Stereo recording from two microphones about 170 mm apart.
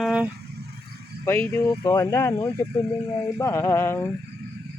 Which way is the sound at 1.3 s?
10° left (ahead or behind).